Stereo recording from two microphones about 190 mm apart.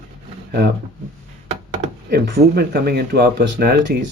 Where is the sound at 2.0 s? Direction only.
55° right (ahead or behind).